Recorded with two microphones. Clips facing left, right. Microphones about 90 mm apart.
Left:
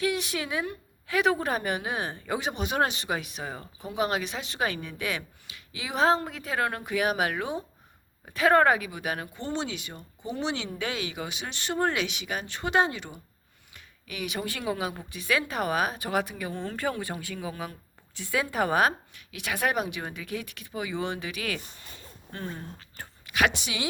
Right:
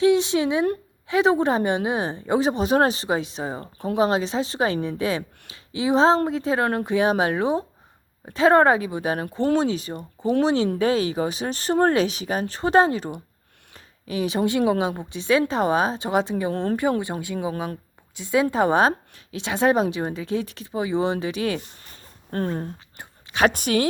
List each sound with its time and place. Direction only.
0.0 s a woman's voice: 25° right (ahead or behind)
10.0 s speech: 70° right (ahead or behind)
10.4 s speech: 35° right (ahead or behind)
13.7 s a sound: 30° right (ahead or behind)
14.7 s a woman's voice: 25° right (ahead or behind)
16.5 s speech: 60° right (ahead or behind)
17.0 s a woman's voice: 20° right (ahead or behind)
22.3 s speech: 45° right (ahead or behind)